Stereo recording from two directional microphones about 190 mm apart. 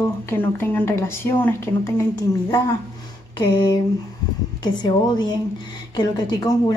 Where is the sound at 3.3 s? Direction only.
25° left (ahead or behind).